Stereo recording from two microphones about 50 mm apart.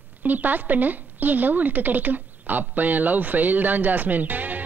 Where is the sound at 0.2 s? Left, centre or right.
Right.